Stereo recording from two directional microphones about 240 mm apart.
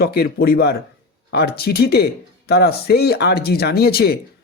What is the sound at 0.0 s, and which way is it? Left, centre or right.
Speech, left.